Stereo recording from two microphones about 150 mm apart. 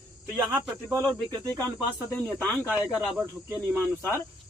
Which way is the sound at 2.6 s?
10° right (ahead or behind).